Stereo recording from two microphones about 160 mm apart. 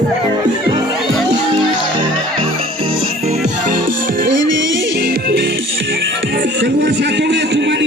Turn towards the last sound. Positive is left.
turn(degrees=-90)